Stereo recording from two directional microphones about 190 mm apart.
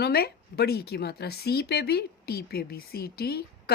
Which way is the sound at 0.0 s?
55° left (ahead or behind).